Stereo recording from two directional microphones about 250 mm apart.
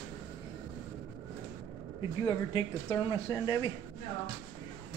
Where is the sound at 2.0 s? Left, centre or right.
Centre.